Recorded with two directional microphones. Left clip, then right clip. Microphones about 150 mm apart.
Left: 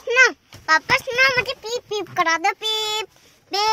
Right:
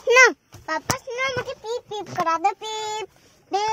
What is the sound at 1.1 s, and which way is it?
Speech, 10° right (ahead or behind).